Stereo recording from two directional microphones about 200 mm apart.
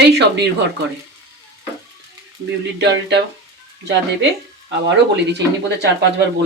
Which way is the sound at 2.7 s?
60° right (ahead or behind).